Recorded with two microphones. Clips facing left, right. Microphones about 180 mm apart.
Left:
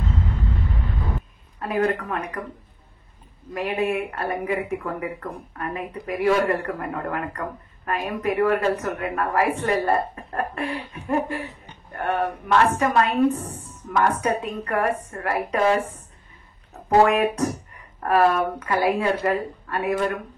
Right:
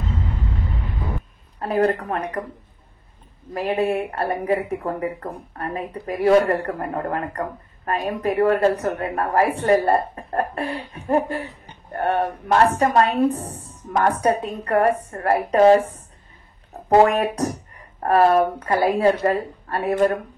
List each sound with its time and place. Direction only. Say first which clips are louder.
1.6 s speech: right 3 dB; 35° right (ahead or behind)
3.5 s speech: right 3 dB; 35° right (ahead or behind)
18.0 s speech: right 3 dB; 35° right (ahead or behind)